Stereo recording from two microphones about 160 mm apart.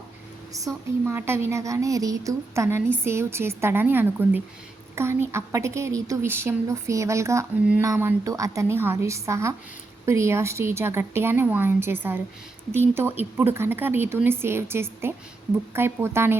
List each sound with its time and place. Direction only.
0.5 s a woman's voice: 20° right (ahead or behind)